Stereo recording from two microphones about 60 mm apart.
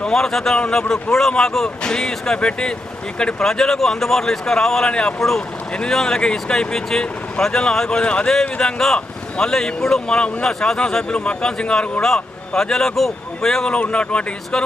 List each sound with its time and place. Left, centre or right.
0.0 s speech: centre
13.7 s speech: centre